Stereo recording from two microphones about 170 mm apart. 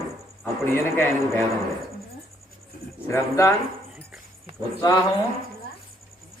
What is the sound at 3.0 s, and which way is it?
Speech, 15° left (ahead or behind).